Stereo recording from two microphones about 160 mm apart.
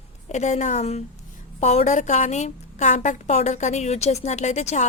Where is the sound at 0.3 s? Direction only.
45° left (ahead or behind).